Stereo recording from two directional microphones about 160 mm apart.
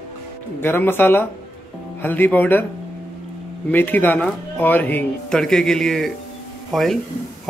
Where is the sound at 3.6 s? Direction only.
10° left (ahead or behind).